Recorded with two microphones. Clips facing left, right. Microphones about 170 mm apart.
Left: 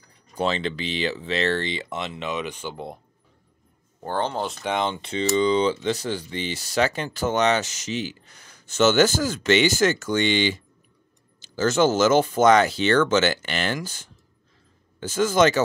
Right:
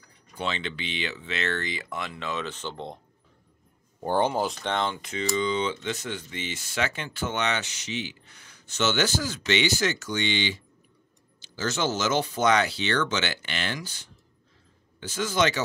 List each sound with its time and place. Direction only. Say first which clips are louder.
0.4 s speech: left 7 dB; 35° left (ahead or behind); by 3.0 s 10° left (ahead or behind)
4.0 s speech: right 2 dB; 15° right (ahead or behind)
4.5 s speech: left 2 dB; 5° left (ahead or behind)
4.7 s speech: left 3 dB; 20° left (ahead or behind); by 15.6 s 45° left (ahead or behind)